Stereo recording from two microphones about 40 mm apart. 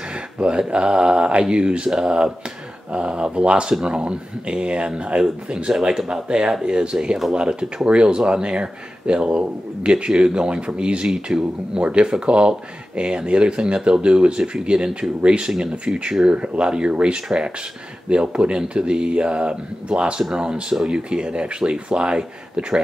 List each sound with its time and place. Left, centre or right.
0.1 s speech: right
1.9 s speech: centre